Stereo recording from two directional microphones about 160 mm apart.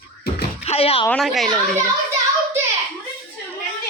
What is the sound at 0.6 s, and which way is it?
Speech, 40° left (ahead or behind).